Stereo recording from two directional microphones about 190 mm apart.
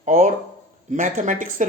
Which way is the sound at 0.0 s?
40° right (ahead or behind).